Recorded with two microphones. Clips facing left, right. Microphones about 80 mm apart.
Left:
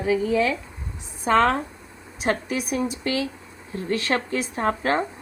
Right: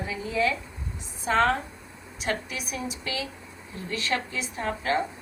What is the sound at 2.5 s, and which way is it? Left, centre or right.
A woman's voice, left.